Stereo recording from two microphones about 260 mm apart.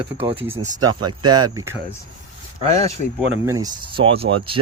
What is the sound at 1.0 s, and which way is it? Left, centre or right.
Speech, centre.